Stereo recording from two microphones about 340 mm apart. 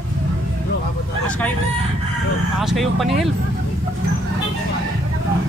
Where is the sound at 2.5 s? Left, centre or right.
Centre.